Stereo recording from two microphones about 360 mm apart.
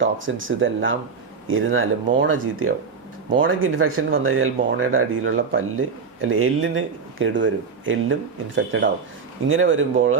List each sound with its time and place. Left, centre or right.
0.0 s speech: right